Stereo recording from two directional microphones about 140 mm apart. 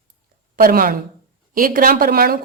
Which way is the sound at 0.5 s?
90° right.